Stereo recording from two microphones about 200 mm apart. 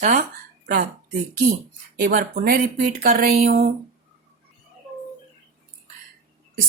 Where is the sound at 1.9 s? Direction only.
50° right (ahead or behind).